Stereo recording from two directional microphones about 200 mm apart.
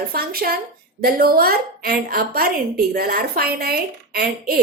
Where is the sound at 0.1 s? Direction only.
50° right (ahead or behind).